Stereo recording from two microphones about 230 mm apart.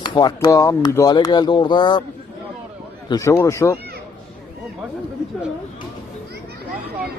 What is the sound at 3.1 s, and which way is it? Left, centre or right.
Speech, centre.